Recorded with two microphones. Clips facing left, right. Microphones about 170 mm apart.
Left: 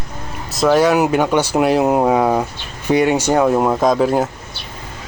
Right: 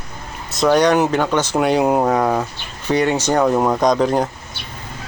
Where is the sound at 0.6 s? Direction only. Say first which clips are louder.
Left 1 dB; 5° left (ahead or behind).